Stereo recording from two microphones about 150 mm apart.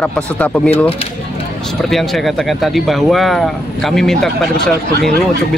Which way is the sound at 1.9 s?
Centre (ahead or behind).